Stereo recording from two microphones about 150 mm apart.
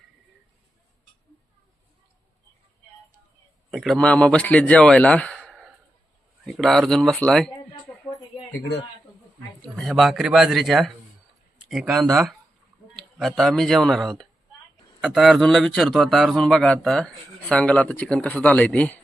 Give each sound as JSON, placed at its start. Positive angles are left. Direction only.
{"t": 3.7, "sound": "a man's voice", "side_deg": 0}
{"t": 5.4, "sound": "sigh", "side_deg": 0}
{"t": 6.4, "sound": "speech", "side_deg": 0}
{"t": 9.6, "sound": "a man's voice", "side_deg": 5}